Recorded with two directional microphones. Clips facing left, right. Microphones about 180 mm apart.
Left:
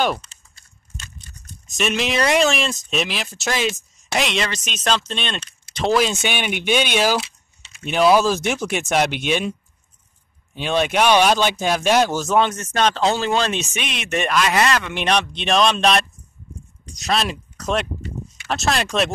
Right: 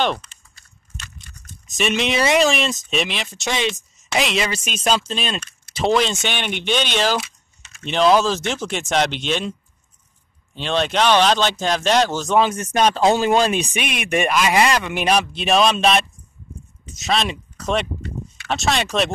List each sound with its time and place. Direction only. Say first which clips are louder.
1.8 s a man's voice: right 1 dB; centre (ahead or behind)
12.4 s speech: right 2 dB; 5° right (ahead or behind)